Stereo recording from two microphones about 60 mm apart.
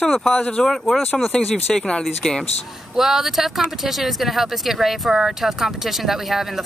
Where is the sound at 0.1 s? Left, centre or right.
Centre.